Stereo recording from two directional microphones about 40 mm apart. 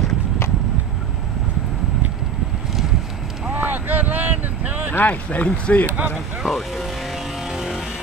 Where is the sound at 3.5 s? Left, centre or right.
Right.